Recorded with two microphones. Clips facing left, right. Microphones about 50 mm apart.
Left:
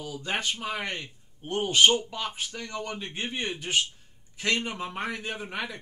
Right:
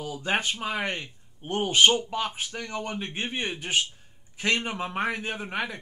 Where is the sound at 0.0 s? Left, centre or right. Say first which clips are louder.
Right 3 dB; right; by 3.8 s centre.